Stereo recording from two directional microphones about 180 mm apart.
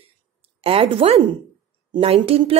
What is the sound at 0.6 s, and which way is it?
Speech, 30° right (ahead or behind).